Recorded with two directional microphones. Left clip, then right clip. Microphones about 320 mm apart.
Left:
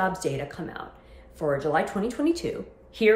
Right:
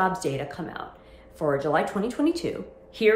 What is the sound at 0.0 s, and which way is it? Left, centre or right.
A woman's voice, centre.